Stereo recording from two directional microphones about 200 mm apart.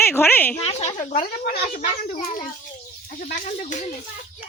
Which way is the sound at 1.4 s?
50° left (ahead or behind).